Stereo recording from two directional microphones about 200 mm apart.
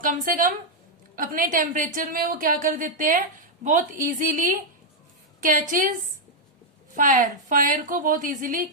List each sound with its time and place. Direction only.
0.0 s a woman's voice: 45° right (ahead or behind)
6.9 s a woman's voice: 40° right (ahead or behind)